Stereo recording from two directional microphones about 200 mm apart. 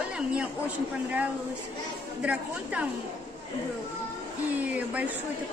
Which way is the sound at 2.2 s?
5° right (ahead or behind).